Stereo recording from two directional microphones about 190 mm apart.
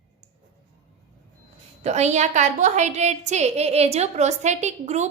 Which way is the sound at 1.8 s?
35° right (ahead or behind).